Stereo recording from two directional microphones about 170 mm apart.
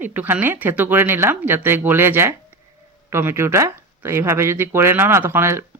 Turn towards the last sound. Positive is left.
turn(degrees=-15)  # may be behind; listen again after turning